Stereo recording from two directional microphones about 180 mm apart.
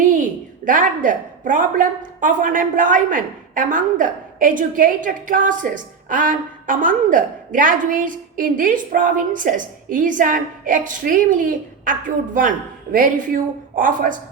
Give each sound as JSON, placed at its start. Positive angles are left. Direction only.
{"t": 0.0, "sound": "a woman's voice", "side_deg": -45}